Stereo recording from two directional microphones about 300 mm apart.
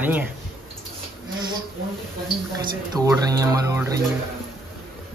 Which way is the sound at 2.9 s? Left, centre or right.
Centre.